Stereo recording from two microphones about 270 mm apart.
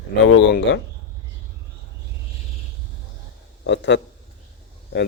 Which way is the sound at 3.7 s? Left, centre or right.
Left.